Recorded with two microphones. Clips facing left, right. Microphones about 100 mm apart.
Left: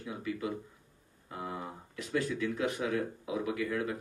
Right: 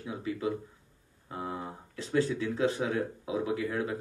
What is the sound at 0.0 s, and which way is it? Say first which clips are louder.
Speech: right 3 dB; 30° right (ahead or behind).